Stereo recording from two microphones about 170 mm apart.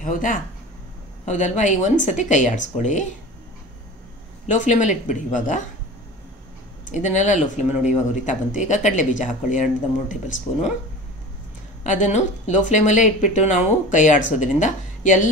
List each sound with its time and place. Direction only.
0.0 s speech: 50° left (ahead or behind)
4.5 s speech: 45° left (ahead or behind)
6.9 s speech: 45° left (ahead or behind)
11.8 s speech: 45° left (ahead or behind)